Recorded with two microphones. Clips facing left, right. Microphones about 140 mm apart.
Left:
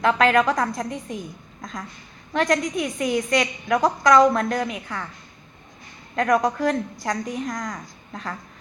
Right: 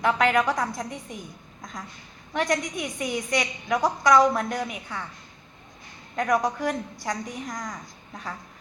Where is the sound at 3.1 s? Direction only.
80° left.